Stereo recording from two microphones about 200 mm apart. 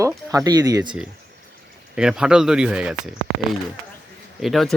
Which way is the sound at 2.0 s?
5° right (ahead or behind).